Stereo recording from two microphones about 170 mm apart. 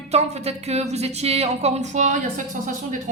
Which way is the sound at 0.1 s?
40° right (ahead or behind).